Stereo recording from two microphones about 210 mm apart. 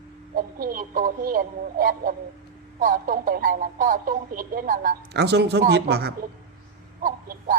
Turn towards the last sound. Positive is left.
turn(degrees=-40)  # may be behind; listen again after turning